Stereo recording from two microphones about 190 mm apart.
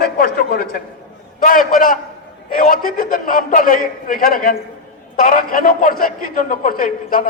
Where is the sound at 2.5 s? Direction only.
45° left (ahead or behind).